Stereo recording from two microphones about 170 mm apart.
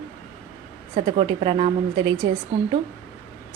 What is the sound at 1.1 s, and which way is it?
A woman's voice, 30° right (ahead or behind).